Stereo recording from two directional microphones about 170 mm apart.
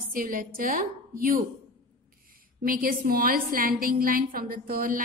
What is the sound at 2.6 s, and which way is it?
A woman's voice, 55° right (ahead or behind).